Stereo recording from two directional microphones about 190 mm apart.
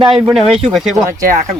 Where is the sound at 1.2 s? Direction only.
40° right (ahead or behind).